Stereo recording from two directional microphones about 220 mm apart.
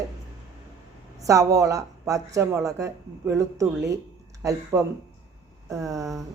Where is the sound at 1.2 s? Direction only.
15° right (ahead or behind).